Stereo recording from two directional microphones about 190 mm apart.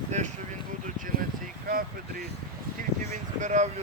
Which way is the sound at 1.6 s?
50° right (ahead or behind).